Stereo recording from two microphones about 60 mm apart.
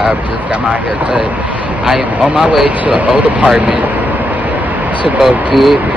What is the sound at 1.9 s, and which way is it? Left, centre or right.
Speech, centre.